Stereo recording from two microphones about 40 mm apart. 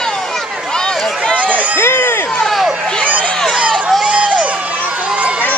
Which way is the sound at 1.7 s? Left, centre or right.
Left.